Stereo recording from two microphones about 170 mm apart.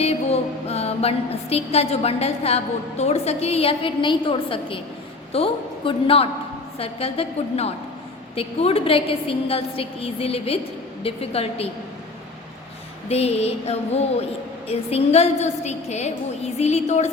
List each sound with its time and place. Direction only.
0.0 s music: 35° left (ahead or behind)
3.0 s a woman's voice: 40° left (ahead or behind)
13.1 s a woman's voice: 35° left (ahead or behind)